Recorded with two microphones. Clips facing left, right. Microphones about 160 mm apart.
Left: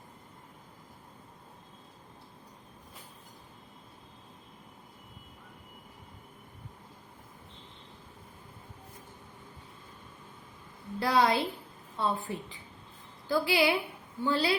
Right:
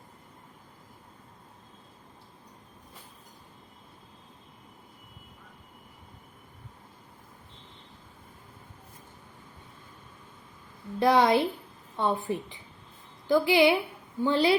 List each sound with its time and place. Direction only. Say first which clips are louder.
11.0 s a woman's voice: right 5 dB; 20° right (ahead or behind)